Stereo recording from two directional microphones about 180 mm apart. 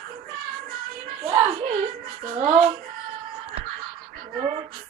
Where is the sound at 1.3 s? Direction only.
30° right (ahead or behind).